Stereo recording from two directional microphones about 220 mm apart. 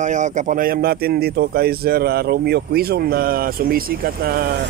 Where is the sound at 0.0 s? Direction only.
35° right (ahead or behind).